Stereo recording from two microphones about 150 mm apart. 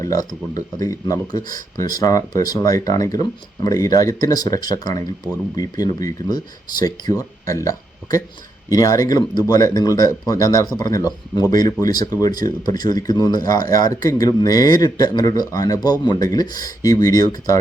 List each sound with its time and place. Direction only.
0.0 s speech: 25° left (ahead or behind)
1.5 s speech: 65° right (ahead or behind)
2.0 s speech: 25° left (ahead or behind)